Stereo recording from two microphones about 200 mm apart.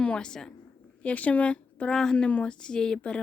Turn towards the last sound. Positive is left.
turn(degrees=5)  # may be behind; listen again after turning